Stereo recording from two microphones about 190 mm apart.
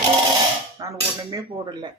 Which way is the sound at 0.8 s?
20° right (ahead or behind).